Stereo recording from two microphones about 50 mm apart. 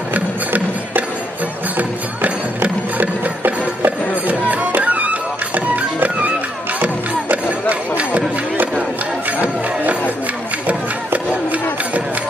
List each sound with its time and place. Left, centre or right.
0.1 s music: right